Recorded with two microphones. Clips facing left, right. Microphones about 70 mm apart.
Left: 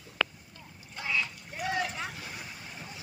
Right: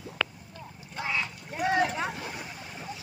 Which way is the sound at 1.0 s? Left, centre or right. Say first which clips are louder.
Right 1 dB; right.